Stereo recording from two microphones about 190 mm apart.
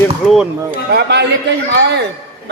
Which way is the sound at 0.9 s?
60° right (ahead or behind).